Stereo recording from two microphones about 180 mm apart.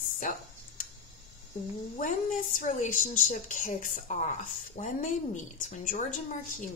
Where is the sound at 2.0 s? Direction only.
50° left (ahead or behind).